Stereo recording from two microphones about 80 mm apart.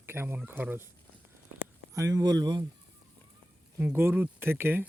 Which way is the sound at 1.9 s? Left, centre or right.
Right.